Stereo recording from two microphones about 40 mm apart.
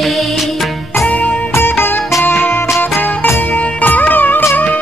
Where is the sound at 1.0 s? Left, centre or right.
Left.